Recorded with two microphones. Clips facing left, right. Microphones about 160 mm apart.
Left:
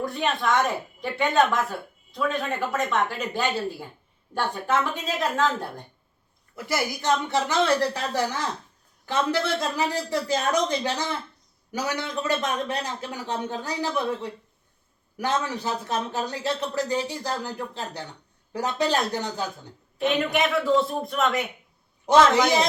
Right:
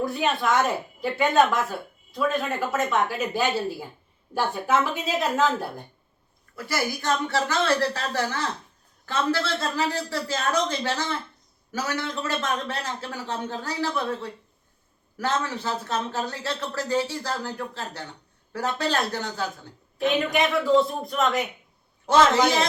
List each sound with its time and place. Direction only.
0.0 s a woman's voice: 5° right (ahead or behind)
6.7 s speech: 20° left (ahead or behind)
20.0 s speech: centre (ahead or behind)
22.0 s speech: 15° left (ahead or behind)